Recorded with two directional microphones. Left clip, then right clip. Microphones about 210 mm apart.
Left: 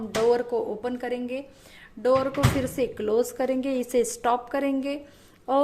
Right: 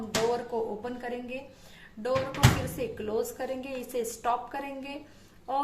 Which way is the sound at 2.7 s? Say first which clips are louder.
Left 7 dB; 45° left (ahead or behind).